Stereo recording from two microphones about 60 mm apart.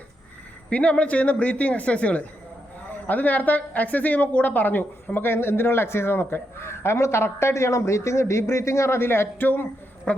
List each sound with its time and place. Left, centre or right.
0.7 s a man's voice: left
10.1 s a woman's voice: centre